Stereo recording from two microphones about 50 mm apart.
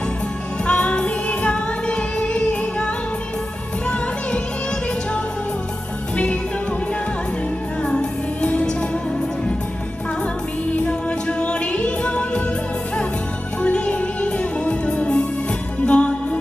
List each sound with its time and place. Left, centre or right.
0.7 s music: left
7.9 s music: left
10.8 s music: left
13.6 s music: left